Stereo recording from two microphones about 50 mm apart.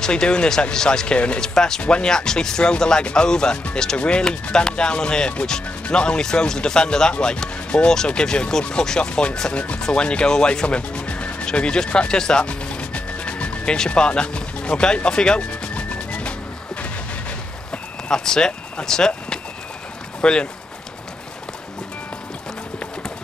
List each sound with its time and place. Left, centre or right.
0.0 s speech: centre
15.0 s music: centre
18.1 s speech: centre